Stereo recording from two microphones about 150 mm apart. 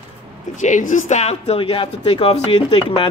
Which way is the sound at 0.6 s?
55° left (ahead or behind).